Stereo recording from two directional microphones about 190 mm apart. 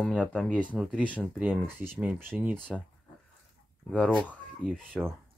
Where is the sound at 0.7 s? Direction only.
5° right (ahead or behind).